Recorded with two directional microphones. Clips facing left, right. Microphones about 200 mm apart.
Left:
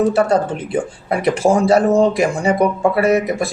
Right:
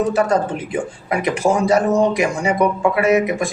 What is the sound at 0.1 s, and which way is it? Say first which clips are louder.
A man's voice: left 2 dB; 35° left (ahead or behind).